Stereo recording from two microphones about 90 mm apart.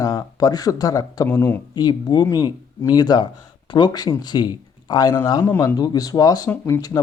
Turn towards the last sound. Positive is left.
turn(degrees=40)  # may be behind; listen again after turning